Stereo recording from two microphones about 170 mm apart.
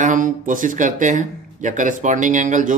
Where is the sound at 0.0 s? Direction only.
50° right (ahead or behind).